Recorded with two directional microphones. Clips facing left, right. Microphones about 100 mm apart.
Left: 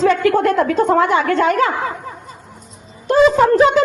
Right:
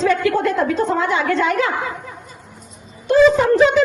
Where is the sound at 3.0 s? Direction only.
40° left (ahead or behind).